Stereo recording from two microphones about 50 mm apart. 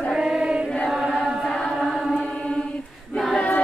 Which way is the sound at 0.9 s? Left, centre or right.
Centre.